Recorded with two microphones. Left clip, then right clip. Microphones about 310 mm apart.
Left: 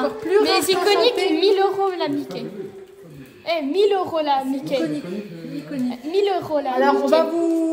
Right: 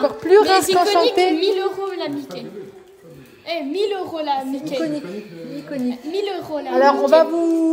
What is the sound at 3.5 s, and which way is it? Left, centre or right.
A woman's voice, left.